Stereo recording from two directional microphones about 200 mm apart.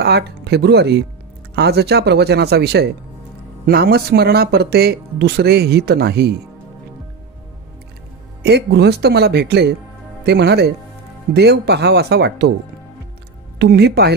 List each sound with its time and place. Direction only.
0.0 s speech: 55° right (ahead or behind)
8.4 s speech: 55° right (ahead or behind)
13.6 s speech: 55° right (ahead or behind)